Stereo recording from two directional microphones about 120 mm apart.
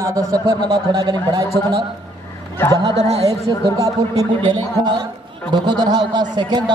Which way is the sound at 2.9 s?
60° right (ahead or behind).